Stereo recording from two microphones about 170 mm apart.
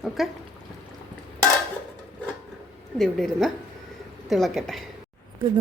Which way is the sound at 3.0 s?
5° left (ahead or behind).